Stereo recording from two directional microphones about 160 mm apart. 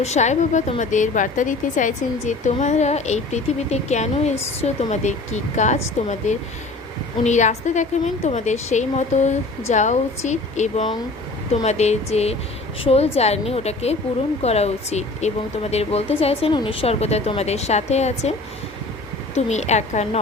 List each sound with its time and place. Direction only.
0.0 s a woman's voice: 45° left (ahead or behind)
7.3 s a woman's voice: 50° left (ahead or behind)
19.4 s a woman's voice: 45° left (ahead or behind)